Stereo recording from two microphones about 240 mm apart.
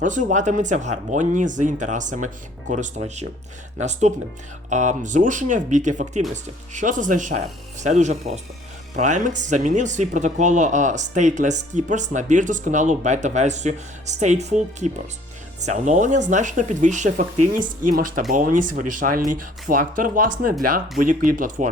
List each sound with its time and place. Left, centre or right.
0.0 s speech: right